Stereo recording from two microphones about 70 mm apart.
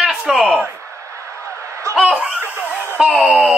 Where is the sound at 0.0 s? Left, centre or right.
Centre.